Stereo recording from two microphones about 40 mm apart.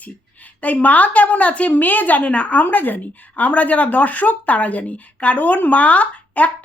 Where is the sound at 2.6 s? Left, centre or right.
Left.